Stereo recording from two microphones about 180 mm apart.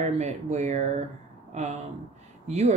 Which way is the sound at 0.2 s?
40° right (ahead or behind).